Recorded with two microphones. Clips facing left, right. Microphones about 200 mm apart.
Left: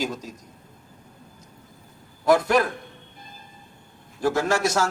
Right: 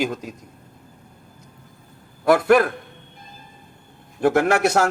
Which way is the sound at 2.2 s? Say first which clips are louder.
Right 4 dB; 60° right (ahead or behind).